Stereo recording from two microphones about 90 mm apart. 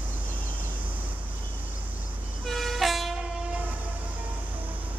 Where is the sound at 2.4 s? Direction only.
Centre (ahead or behind).